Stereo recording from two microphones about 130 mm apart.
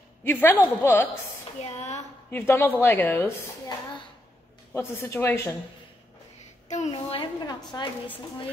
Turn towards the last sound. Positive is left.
turn(degrees=35)  # may be behind; listen again after turning